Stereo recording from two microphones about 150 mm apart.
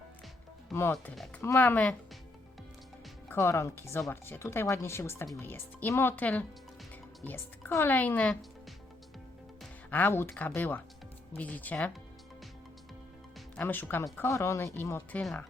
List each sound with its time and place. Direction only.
0.7 s speech: 15° left (ahead or behind)
3.2 s speech: 20° left (ahead or behind)
9.9 s speech: 15° left (ahead or behind)
13.6 s speech: 15° left (ahead or behind)